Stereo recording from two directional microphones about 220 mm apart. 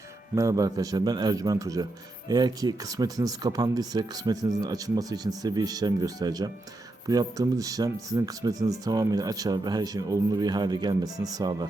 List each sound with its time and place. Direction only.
0.3 s a man's voice: 15° right (ahead or behind)